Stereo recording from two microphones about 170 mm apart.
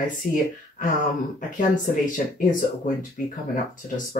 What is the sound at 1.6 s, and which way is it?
Speech, 50° left (ahead or behind).